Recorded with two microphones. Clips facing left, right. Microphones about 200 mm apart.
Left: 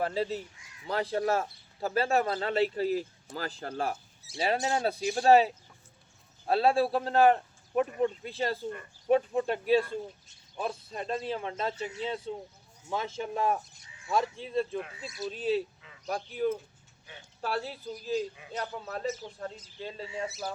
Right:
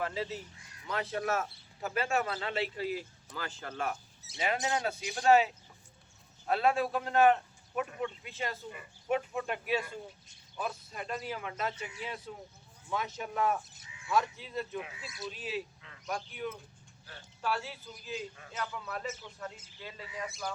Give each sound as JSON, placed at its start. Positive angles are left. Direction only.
{"t": 0.0, "sound": "speech", "side_deg": 35}
{"t": 14.8, "sound": "speech", "side_deg": 0}
{"t": 15.3, "sound": "speech", "side_deg": 35}